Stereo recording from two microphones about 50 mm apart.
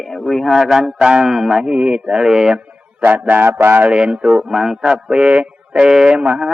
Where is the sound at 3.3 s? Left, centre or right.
Right.